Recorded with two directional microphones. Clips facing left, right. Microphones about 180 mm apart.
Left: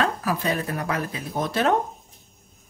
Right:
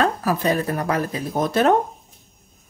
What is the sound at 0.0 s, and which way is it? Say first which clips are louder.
Speech: right 4 dB; 40° right (ahead or behind).